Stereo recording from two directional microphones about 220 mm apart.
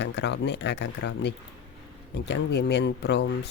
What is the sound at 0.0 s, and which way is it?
Speech, 50° left (ahead or behind).